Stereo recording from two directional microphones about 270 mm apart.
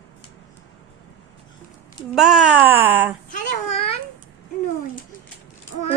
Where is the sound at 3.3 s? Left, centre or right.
Left.